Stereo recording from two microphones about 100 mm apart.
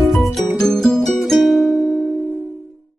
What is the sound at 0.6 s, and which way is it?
Music, 10° left (ahead or behind).